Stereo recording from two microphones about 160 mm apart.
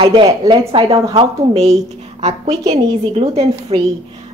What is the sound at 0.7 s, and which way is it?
A woman's voice, 35° right (ahead or behind).